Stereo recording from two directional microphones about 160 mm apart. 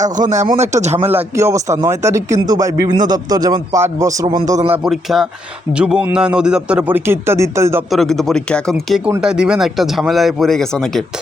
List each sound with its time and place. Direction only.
0.0 s speech: 50° right (ahead or behind)
1.1 s a man's voice: 15° right (ahead or behind)
4.7 s a man's voice: centre (ahead or behind)
7.9 s speech: centre (ahead or behind)